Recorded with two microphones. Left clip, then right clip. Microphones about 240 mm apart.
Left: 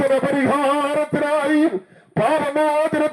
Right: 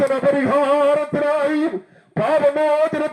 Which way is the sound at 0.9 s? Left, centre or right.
Left.